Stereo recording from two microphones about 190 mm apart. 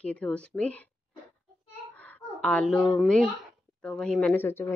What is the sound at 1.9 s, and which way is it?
A child's voice, 5° left (ahead or behind).